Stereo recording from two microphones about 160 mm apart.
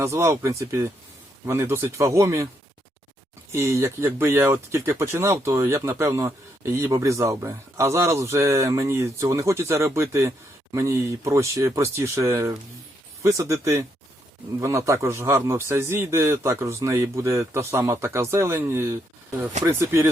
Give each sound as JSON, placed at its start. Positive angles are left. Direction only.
{"t": 0.0, "sound": "speech", "side_deg": -15}
{"t": 3.5, "sound": "speech", "side_deg": -20}